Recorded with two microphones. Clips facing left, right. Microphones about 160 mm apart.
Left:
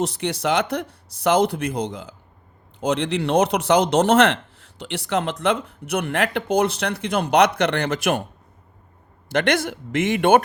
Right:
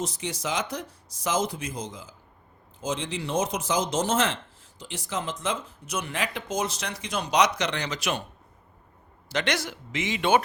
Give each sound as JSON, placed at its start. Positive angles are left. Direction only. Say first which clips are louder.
{"t": 0.0, "sound": "speech", "louder": "left 8 dB", "side_deg": 65}
{"t": 9.3, "sound": "speech", "louder": "left 8 dB", "side_deg": 55}